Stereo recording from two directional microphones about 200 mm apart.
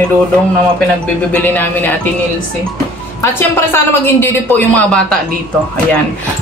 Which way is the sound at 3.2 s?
10° left (ahead or behind).